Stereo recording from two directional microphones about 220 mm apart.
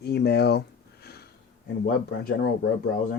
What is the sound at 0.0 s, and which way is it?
Speech, 50° left (ahead or behind).